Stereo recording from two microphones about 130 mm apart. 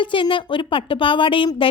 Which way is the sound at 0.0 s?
40° left (ahead or behind).